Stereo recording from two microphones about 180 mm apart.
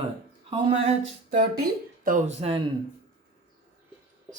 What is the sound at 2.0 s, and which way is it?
Speech, 45° right (ahead or behind).